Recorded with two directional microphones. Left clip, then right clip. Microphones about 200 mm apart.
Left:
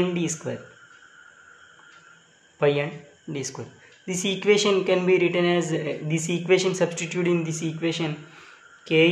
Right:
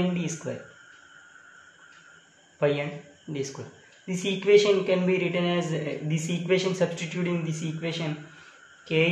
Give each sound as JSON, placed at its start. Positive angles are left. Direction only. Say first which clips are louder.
{"t": 0.1, "sound": "speech", "louder": "left 4 dB", "side_deg": 35}
{"t": 2.6, "sound": "speech", "louder": "left 3 dB", "side_deg": 30}